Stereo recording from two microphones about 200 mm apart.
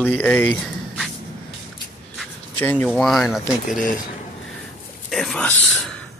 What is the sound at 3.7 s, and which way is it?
Speech, 40° left (ahead or behind).